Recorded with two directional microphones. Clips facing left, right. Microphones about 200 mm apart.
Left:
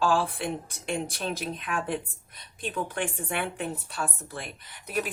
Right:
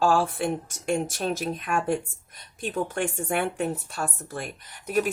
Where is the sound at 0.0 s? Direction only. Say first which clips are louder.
Right 3 dB; 45° right (ahead or behind).